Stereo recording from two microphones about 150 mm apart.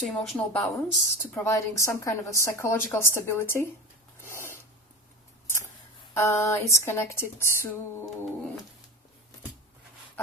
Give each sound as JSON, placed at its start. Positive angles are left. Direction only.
{"t": 0.0, "sound": "a woman's voice", "side_deg": 5}
{"t": 1.2, "sound": "a woman's voice", "side_deg": 15}
{"t": 4.2, "sound": "filing", "side_deg": 15}
{"t": 6.1, "sound": "a woman's voice", "side_deg": 20}